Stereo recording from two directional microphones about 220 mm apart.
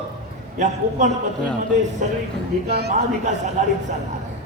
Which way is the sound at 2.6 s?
45° right (ahead or behind).